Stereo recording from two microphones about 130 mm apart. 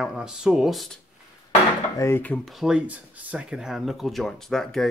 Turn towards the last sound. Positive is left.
turn(degrees=5)  # may be behind; listen again after turning